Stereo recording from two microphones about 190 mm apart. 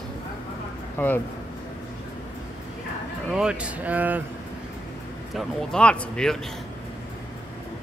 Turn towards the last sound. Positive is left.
turn(degrees=5)  # may be behind; listen again after turning